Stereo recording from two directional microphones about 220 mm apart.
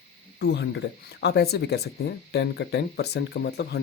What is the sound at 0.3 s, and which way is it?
Speech, 50° left (ahead or behind).